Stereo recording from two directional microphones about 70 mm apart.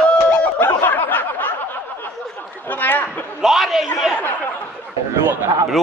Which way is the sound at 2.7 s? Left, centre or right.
Left.